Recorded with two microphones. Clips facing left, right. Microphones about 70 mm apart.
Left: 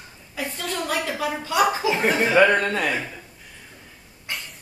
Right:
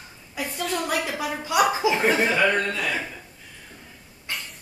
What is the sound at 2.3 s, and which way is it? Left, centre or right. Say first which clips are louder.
Speech: left 5 dB; left.